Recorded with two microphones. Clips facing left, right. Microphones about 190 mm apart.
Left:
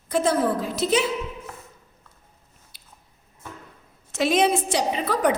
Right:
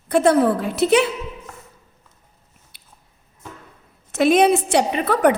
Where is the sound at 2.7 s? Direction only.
60° right (ahead or behind).